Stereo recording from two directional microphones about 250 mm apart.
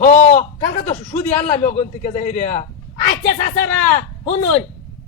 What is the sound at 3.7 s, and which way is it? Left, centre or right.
Speech, centre.